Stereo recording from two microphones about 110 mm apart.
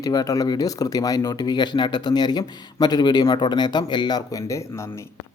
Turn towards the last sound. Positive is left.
turn(degrees=40)  # may be behind; listen again after turning